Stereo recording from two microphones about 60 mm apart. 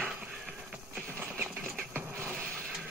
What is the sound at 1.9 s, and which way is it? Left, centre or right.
Mechanisms, right.